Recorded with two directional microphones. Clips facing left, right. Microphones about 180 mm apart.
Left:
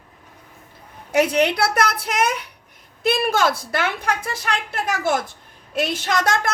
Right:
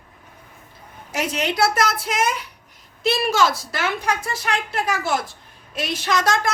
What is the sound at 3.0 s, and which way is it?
Speech, 50° left (ahead or behind).